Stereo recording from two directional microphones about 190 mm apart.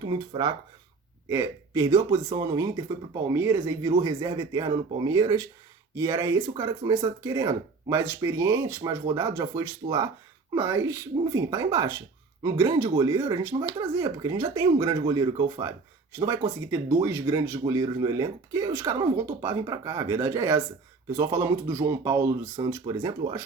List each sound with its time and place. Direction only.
0.0 s speech: 20° right (ahead or behind)